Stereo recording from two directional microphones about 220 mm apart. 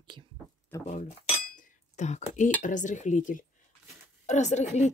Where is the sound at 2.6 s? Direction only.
35° left (ahead or behind).